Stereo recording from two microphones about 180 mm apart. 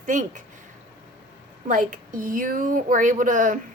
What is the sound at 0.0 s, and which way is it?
Speech, 45° right (ahead or behind).